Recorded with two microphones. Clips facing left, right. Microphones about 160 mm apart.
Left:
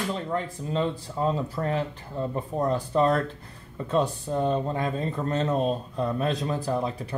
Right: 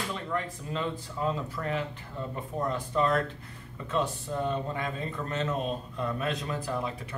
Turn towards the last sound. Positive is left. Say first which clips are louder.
# left 5 dB
turn(degrees=35)  # may be behind; listen again after turning